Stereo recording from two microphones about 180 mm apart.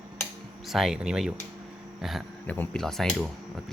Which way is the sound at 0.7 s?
Centre (ahead or behind).